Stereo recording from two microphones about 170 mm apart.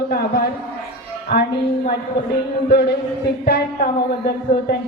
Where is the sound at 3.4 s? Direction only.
60° left (ahead or behind).